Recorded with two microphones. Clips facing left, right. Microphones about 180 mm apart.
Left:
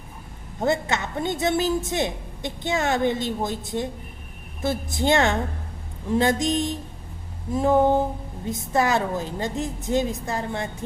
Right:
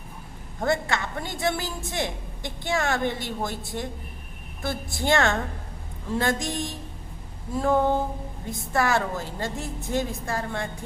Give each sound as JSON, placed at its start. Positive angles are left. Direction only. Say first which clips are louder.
{"t": 0.6, "sound": "a woman's voice", "louder": "left 2 dB", "side_deg": 20}